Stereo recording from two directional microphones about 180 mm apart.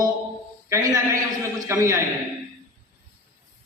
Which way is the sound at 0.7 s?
15° right (ahead or behind).